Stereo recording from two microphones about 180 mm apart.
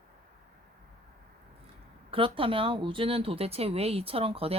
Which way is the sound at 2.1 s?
30° right (ahead or behind).